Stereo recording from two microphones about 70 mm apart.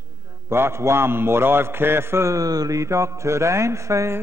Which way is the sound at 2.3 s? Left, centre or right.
Right.